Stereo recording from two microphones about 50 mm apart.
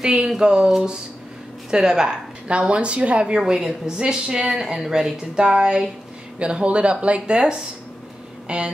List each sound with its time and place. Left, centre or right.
0.0 s a woman's voice: centre
1.7 s a woman's voice: centre